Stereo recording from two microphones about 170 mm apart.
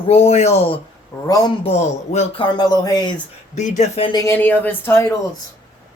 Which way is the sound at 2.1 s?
40° left (ahead or behind).